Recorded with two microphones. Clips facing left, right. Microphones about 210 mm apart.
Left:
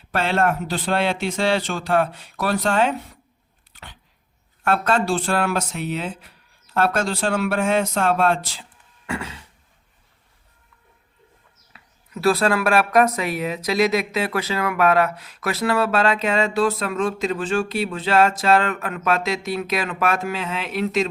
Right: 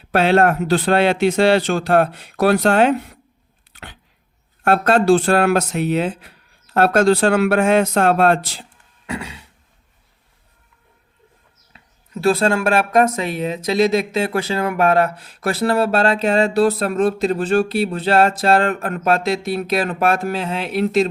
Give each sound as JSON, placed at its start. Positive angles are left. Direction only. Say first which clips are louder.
{"t": 0.1, "sound": "speech", "louder": "right 6 dB", "side_deg": -70}
{"t": 4.8, "sound": "speech", "louder": "right 7 dB", "side_deg": -65}
{"t": 9.0, "sound": "a sound", "louder": "right 1 dB", "side_deg": -15}
{"t": 11.7, "sound": "speech", "louder": "right 3 dB", "side_deg": -25}